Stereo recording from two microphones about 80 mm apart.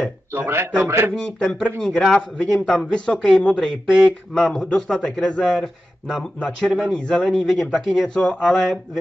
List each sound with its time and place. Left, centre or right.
0.3 s a man's voice: right
1.2 s speech: centre
8.1 s speech: centre
8.4 s speech: centre